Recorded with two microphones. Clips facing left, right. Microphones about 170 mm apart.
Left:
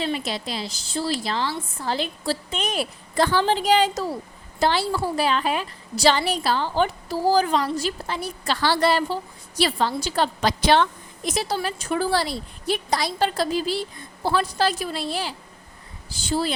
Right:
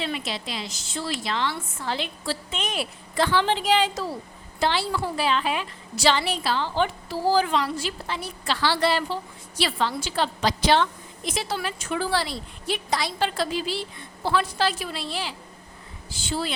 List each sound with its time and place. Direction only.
0.0 s a woman's voice: 40° left (ahead or behind); by 10.8 s 55° left (ahead or behind)
11.3 s a woman's voice: 40° left (ahead or behind)